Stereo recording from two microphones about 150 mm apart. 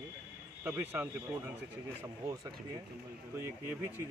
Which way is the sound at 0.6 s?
15° right (ahead or behind).